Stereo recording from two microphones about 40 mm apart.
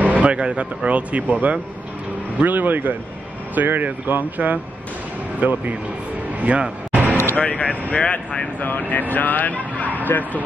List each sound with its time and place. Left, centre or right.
0.0 s a sound: right
0.3 s speech: right
2.4 s speech: right
4.4 s speech: right
6.9 s a sound: right
7.3 s speech: left
8.6 s speech: left